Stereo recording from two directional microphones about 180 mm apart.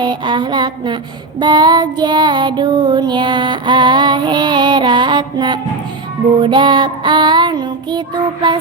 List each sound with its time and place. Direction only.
0.0 s child singing: 25° right (ahead or behind)